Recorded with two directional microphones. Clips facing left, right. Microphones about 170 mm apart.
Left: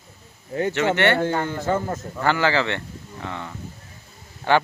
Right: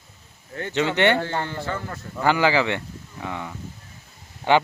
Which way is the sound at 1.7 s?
45° left (ahead or behind).